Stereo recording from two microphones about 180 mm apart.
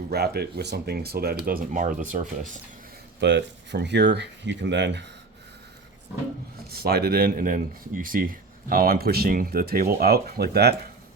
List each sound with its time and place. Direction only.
0.1 s speech: 60° right (ahead or behind); by 2.5 s 45° right (ahead or behind)
3.2 s speech: 80° right
6.7 s speech: 60° right (ahead or behind)